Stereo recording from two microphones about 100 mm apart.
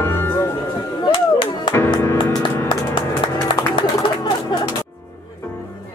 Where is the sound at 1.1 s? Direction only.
60° left (ahead or behind).